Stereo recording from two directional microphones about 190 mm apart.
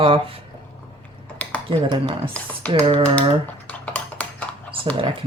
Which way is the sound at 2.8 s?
25° right (ahead or behind).